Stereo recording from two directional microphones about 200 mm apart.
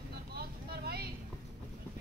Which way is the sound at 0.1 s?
50° right (ahead or behind).